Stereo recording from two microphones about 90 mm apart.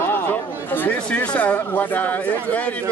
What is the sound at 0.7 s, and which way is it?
Speech, 20° left (ahead or behind).